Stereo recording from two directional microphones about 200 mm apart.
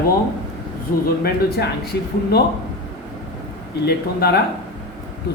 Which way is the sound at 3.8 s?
50° left (ahead or behind).